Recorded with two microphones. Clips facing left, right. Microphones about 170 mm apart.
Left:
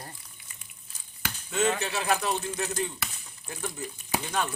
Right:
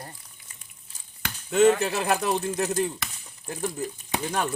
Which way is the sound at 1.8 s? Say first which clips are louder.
Right 3 dB; 50° right (ahead or behind).